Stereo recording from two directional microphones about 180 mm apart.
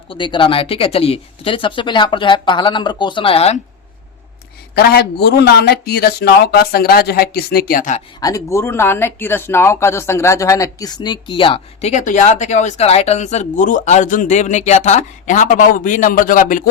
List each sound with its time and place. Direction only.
0.1 s speech: 25° left (ahead or behind)
4.7 s speech: 60° left (ahead or behind); by 8.0 s 45° left (ahead or behind)
8.2 s speech: 15° left (ahead or behind); by 16.6 s 50° left (ahead or behind)